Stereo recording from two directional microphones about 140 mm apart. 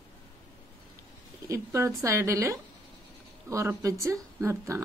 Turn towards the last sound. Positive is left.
turn(degrees=-20)  # may be behind; listen again after turning